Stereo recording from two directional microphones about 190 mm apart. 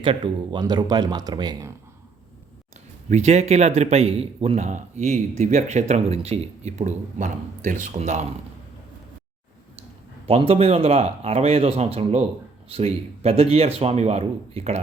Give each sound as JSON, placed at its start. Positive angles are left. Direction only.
{"t": 0.0, "sound": "speech", "side_deg": -25}
{"t": 3.1, "sound": "speech", "side_deg": -35}
{"t": 10.2, "sound": "speech", "side_deg": -30}